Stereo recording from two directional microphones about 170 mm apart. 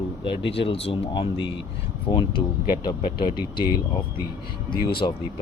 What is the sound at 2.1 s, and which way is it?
Speech, 15° left (ahead or behind).